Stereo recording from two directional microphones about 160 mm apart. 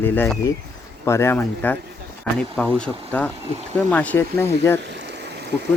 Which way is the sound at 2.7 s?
10° left (ahead or behind).